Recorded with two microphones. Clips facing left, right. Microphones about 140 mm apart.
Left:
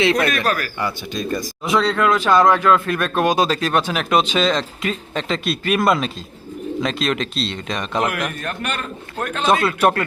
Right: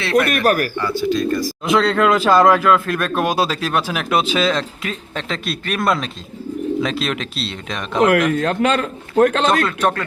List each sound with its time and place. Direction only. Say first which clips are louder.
0.0 s speech: even; 15° left (ahead or behind)
0.3 s speech: right 4 dB; 55° right (ahead or behind)
0.8 s speech: right 6 dB; 15° left (ahead or behind)
1.6 s speech: right 2 dB; centre (ahead or behind)
8.0 s a man's voice: right 8 dB; 90° right
9.5 s speech: left 1 dB; 10° left (ahead or behind)